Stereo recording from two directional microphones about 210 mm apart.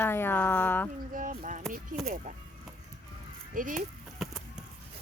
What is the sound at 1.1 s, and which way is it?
Speech, 40° right (ahead or behind).